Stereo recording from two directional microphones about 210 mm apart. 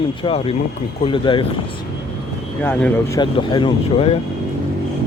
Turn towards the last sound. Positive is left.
turn(degrees=25)  # may be behind; listen again after turning